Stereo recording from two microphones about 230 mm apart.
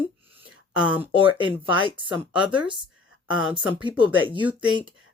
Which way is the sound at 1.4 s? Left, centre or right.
Right.